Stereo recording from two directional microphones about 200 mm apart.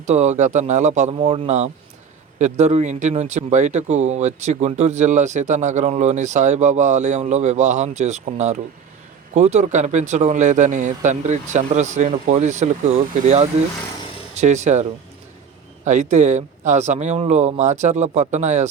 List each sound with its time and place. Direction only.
0.0 s speech: 35° right (ahead or behind)